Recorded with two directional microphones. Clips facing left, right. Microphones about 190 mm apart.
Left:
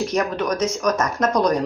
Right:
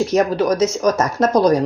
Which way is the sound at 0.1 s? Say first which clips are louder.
Right 6 dB; 30° right (ahead or behind).